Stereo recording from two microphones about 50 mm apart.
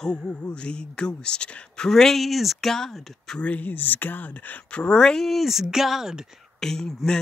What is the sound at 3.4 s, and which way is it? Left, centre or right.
Speech, left.